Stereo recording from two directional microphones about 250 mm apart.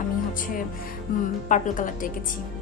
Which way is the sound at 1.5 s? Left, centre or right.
Left.